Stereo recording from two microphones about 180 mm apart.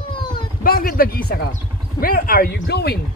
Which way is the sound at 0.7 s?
55° left (ahead or behind).